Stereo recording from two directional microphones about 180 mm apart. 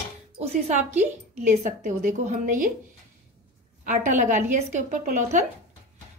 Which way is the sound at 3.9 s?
45° right (ahead or behind).